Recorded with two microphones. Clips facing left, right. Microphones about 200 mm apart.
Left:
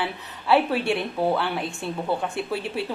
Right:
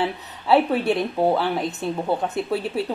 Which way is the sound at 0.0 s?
20° right (ahead or behind).